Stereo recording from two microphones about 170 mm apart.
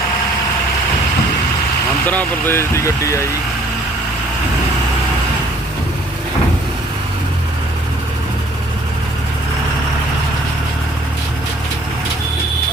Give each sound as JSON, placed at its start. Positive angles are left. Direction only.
{"t": 2.0, "sound": "speech", "side_deg": 10}